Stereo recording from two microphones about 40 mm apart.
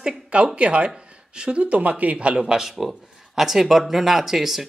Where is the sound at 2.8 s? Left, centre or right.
Centre.